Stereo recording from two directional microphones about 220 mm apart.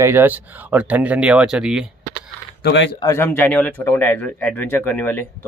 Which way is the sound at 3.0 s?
10° left (ahead or behind).